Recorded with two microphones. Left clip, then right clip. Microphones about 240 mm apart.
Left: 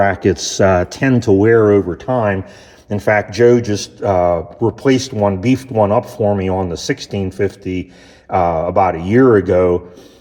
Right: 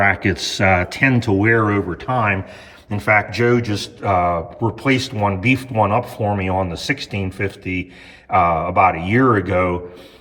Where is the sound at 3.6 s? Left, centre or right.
Centre.